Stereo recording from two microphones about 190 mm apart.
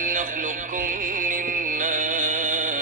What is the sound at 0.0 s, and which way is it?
Music, 45° right (ahead or behind).